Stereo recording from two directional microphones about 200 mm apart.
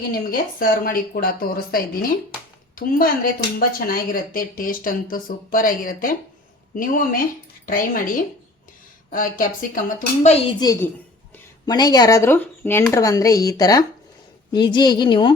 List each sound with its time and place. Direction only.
0.1 s speech: 45° left (ahead or behind)
10.6 s a woman's voice: 15° left (ahead or behind)